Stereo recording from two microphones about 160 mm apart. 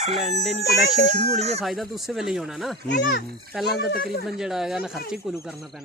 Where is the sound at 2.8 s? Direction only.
90° left.